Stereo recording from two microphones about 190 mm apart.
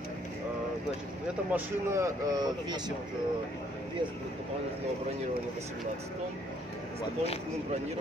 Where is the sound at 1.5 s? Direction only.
15° right (ahead or behind).